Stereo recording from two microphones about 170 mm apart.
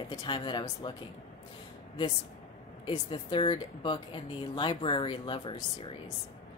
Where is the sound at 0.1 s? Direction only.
25° left (ahead or behind).